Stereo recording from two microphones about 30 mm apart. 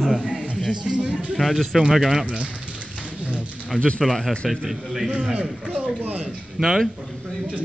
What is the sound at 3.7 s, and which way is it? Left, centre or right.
Speech, right.